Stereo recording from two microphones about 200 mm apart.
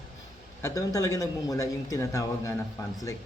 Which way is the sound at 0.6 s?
15° left (ahead or behind).